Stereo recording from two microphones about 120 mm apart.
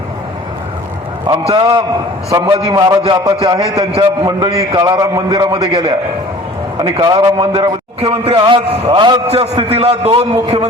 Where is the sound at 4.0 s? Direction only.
40° right (ahead or behind).